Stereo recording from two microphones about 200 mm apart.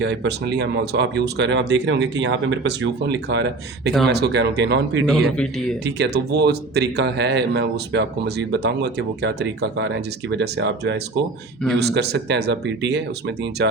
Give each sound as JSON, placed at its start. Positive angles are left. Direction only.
{"t": 0.0, "sound": "speech", "side_deg": -60}
{"t": 5.0, "sound": "a man's voice", "side_deg": 5}
{"t": 5.8, "sound": "speech", "side_deg": -55}